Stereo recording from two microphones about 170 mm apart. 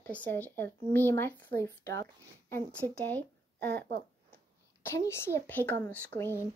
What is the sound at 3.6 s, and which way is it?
Speech, 75° right (ahead or behind).